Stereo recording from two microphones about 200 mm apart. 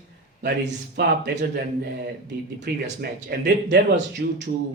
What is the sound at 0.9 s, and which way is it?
Speech, 55° right (ahead or behind).